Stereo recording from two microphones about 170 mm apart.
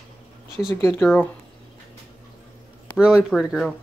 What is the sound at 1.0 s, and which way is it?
Speech, centre (ahead or behind).